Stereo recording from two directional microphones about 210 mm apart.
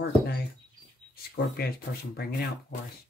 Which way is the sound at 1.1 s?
45° left (ahead or behind).